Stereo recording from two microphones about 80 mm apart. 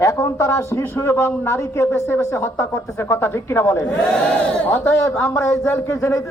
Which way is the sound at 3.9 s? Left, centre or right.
Centre.